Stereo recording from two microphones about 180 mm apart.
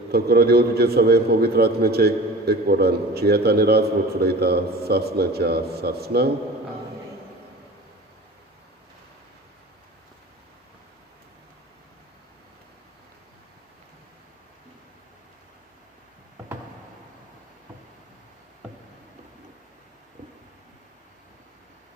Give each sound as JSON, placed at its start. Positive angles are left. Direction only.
{"t": 0.1, "sound": "a man's voice", "side_deg": -60}